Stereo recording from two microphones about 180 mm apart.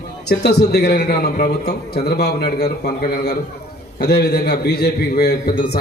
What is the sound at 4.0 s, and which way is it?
A man's voice, 65° left (ahead or behind).